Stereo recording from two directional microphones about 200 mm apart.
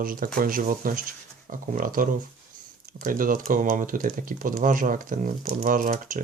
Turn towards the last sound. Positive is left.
turn(degrees=-45)  # may be behind; listen again after turning